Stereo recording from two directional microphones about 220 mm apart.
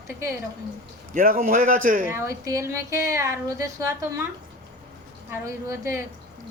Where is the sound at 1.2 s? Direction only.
40° right (ahead or behind).